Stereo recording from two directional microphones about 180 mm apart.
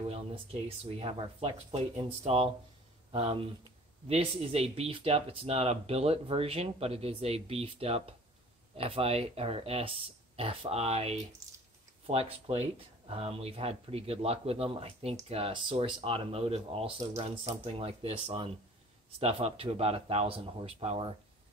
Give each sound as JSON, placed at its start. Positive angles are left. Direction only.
{"t": 0.1, "sound": "speech", "side_deg": -35}